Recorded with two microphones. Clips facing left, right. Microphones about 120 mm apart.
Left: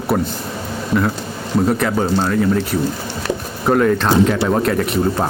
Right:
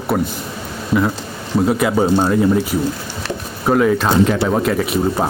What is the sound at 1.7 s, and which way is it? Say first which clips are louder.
Speech: right 2 dB; 10° right (ahead or behind).